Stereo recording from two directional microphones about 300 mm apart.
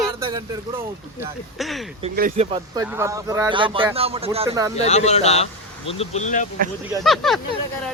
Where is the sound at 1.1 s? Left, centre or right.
Centre.